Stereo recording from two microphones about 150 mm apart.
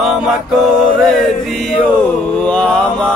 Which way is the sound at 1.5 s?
5° left (ahead or behind).